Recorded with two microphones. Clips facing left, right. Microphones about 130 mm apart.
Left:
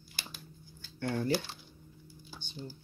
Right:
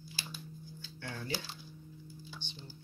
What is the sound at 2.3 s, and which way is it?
Speech, 45° left (ahead or behind).